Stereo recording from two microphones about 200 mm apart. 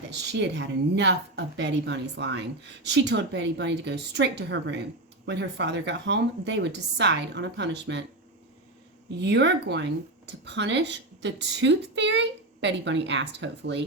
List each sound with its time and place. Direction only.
0.1 s a woman's voice: 60° right (ahead or behind)
9.0 s a woman's voice: 60° right (ahead or behind)